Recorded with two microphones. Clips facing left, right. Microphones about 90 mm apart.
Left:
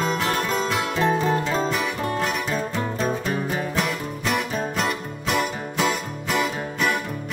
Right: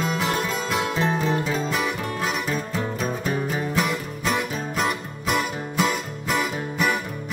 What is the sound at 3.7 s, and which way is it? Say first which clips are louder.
Music: right 1 dB; centre (ahead or behind).